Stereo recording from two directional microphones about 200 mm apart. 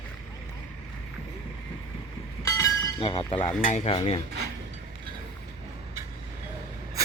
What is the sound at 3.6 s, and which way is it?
Speech, 35° left (ahead or behind).